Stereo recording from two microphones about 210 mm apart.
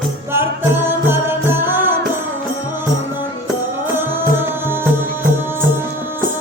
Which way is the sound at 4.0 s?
10° right (ahead or behind).